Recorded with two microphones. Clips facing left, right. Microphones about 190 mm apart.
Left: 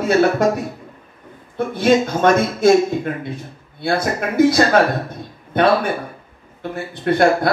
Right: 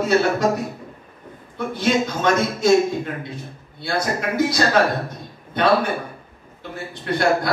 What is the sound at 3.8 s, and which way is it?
Speech, 55° left (ahead or behind).